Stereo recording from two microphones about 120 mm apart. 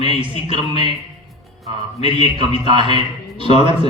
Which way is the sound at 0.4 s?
40° right (ahead or behind).